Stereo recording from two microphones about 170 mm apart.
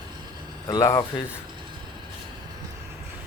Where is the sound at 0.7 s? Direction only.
20° left (ahead or behind).